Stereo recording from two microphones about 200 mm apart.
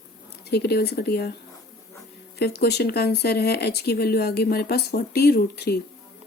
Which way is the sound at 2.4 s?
55° left (ahead or behind).